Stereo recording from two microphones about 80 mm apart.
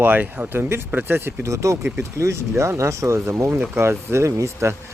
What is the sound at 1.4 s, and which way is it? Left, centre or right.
Speech, right.